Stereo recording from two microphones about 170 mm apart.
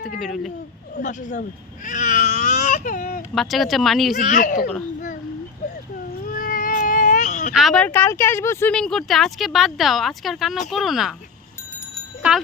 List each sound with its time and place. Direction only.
0.2 s speech: centre (ahead or behind)
0.9 s speech: 45° left (ahead or behind)
3.3 s speech: centre (ahead or behind)
4.2 s speech: 50° left (ahead or behind)
6.2 s baby cry: 55° left (ahead or behind)
7.5 s speech: centre (ahead or behind)
8.7 s speech: 5° left (ahead or behind)